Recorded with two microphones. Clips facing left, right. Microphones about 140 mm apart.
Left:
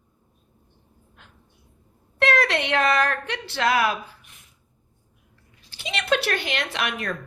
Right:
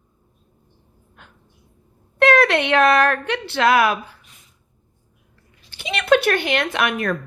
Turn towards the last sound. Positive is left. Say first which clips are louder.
# right 7 dB
turn(degrees=-55)  # may be behind; listen again after turning